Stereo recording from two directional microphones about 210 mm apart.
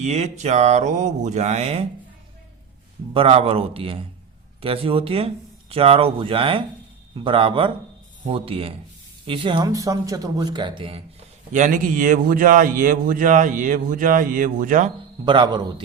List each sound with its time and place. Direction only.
0.0 s a man's voice: 35° right (ahead or behind)
3.1 s speech: 25° right (ahead or behind)
11.5 s a man's voice: 35° right (ahead or behind)
15.2 s speech: 20° right (ahead or behind)